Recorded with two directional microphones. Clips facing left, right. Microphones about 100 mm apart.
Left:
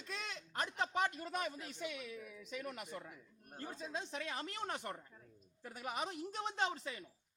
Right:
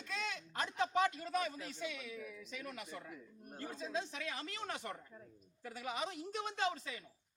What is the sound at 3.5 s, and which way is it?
A man's voice, 30° left (ahead or behind).